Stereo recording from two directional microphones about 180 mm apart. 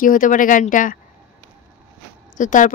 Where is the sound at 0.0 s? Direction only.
50° left (ahead or behind).